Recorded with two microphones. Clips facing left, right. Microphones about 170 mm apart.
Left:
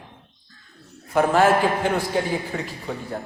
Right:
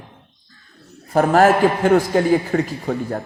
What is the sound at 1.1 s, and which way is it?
A woman's voice, 45° right (ahead or behind).